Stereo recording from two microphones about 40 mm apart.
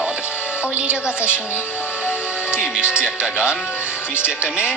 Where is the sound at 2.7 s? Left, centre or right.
Right.